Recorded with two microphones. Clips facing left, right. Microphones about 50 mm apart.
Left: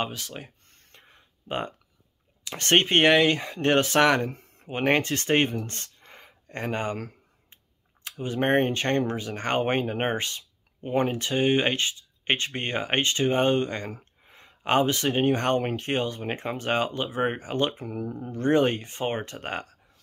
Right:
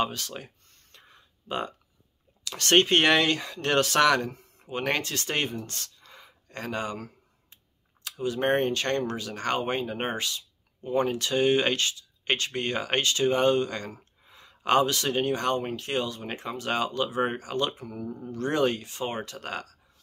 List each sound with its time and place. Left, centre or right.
0.1 s speech: centre
0.9 s a sound: left
2.4 s speech: left
4.3 s speech: left
8.0 s speech: left
13.9 s a sound: left
15.3 s speech: left
15.7 s speech: left